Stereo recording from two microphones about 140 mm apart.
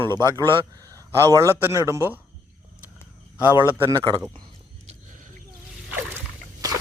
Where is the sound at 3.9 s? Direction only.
35° right (ahead or behind).